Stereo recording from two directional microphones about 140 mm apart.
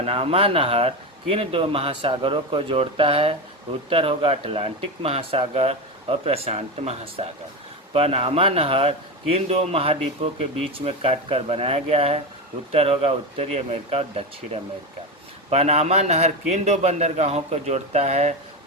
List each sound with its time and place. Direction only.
0.0 s speech: 45° right (ahead or behind)